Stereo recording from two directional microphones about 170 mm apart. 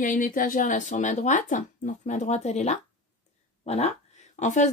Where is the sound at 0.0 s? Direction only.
50° left (ahead or behind).